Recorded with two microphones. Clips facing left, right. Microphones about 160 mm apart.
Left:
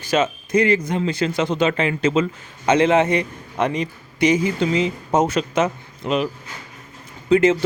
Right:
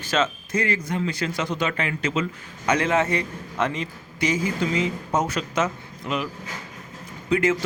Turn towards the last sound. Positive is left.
turn(degrees=25)  # may be behind; listen again after turning